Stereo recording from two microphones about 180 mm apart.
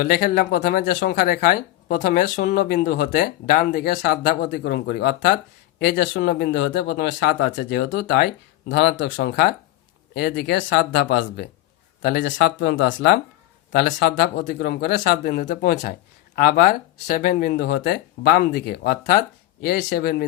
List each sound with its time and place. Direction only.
0.0 s speech: 55° left (ahead or behind)
7.5 s speech: 55° left (ahead or behind)
13.7 s speech: 60° left (ahead or behind)